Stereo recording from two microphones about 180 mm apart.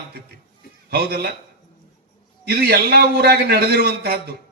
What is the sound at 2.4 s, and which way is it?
A man's voice, 60° right (ahead or behind).